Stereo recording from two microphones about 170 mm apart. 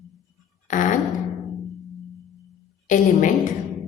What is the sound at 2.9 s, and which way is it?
Speech, 50° left (ahead or behind).